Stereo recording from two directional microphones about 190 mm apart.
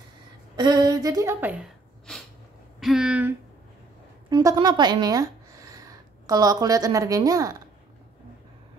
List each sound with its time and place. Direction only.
0.6 s a woman's voice: 20° right (ahead or behind)
2.1 s a sound: 5° left (ahead or behind)
4.3 s a woman's voice: 20° right (ahead or behind)